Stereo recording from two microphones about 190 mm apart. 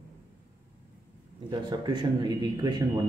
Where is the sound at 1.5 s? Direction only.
20° right (ahead or behind).